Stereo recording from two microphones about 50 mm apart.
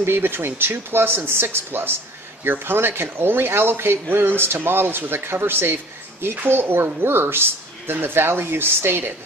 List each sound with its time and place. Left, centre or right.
0.0 s speech: right